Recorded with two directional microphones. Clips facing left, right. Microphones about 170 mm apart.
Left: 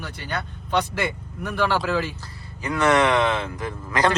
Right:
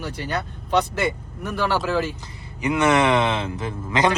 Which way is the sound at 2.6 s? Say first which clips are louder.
Right 1 dB; 20° right (ahead or behind).